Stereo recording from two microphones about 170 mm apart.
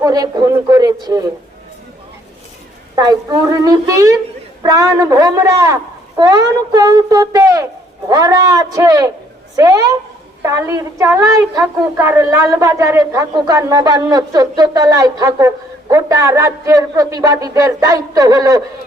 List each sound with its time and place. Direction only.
0.0 s a woman's voice: 20° right (ahead or behind)
2.9 s a woman's voice: 20° right (ahead or behind)